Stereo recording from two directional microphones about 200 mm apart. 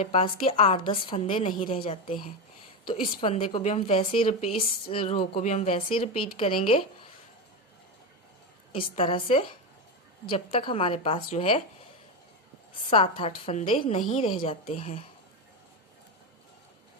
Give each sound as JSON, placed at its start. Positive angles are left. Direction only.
{"t": 0.0, "sound": "speech", "side_deg": 30}
{"t": 8.7, "sound": "speech", "side_deg": 25}
{"t": 12.9, "sound": "speech", "side_deg": 25}